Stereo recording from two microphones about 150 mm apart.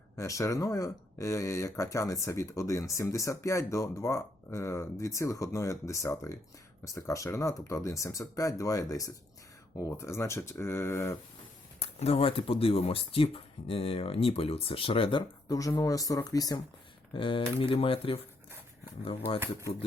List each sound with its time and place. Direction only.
0.2 s speech: 20° left (ahead or behind)
11.9 s speech: 40° left (ahead or behind)
15.4 s speech: 20° left (ahead or behind)
17.2 s speech: 35° left (ahead or behind)